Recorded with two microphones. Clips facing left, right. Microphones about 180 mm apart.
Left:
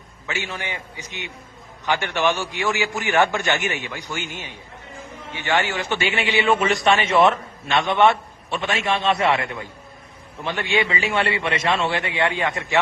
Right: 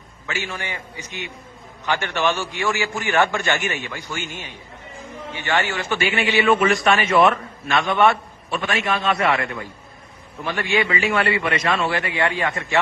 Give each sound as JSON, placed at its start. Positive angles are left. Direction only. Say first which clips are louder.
{"t": 0.3, "sound": "a man's voice", "louder": "even", "side_deg": 20}
{"t": 6.7, "sound": "a man's voice", "louder": "right 1 dB", "side_deg": 0}
{"t": 6.9, "sound": "a man's voice", "louder": "even", "side_deg": 25}